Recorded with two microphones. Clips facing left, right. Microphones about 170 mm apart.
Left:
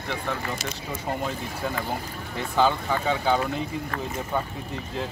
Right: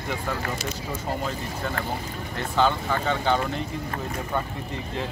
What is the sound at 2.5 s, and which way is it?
Speech, 10° left (ahead or behind).